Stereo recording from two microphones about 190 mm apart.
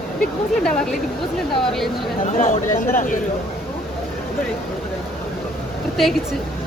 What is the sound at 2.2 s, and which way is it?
Speech, 40° left (ahead or behind).